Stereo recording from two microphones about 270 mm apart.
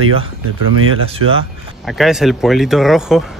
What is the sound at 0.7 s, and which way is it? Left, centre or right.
Speech, right.